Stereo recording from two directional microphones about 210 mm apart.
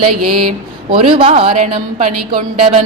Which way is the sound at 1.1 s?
25° right (ahead or behind).